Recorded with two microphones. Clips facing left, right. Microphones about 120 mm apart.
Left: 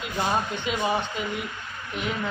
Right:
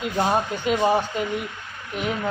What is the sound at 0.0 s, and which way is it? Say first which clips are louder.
Speech: right 5 dB; 40° right (ahead or behind).